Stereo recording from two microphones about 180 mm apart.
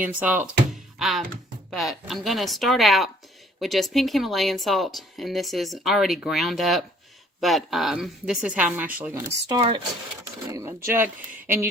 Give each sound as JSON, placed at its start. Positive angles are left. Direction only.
{"t": 0.0, "sound": "speech", "side_deg": -10}
{"t": 9.5, "sound": "speech", "side_deg": -25}